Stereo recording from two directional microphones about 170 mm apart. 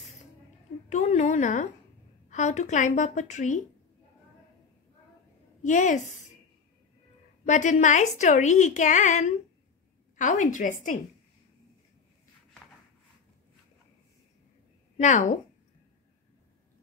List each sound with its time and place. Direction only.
0.8 s a woman's voice: 40° left (ahead or behind)
5.6 s a woman's voice: 45° left (ahead or behind)
7.4 s a woman's voice: 45° left (ahead or behind)
15.0 s a woman's voice: 45° left (ahead or behind)